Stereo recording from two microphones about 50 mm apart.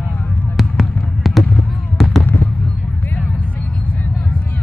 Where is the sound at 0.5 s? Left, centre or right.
Centre.